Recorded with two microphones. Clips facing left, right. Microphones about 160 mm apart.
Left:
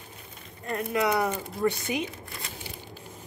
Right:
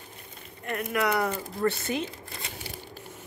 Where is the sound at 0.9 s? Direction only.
25° left (ahead or behind).